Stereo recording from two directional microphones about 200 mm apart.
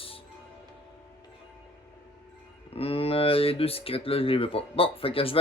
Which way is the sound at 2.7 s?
30° left (ahead or behind).